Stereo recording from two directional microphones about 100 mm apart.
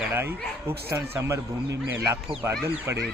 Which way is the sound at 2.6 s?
20° right (ahead or behind).